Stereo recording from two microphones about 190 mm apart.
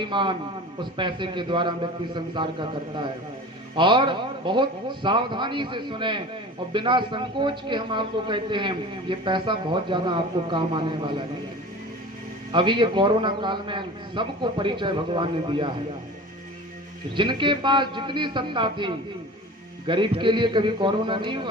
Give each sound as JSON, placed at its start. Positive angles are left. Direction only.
{"t": 0.0, "sound": "a man's voice", "side_deg": -25}
{"t": 12.5, "sound": "a man's voice", "side_deg": -25}
{"t": 17.2, "sound": "a man's voice", "side_deg": -25}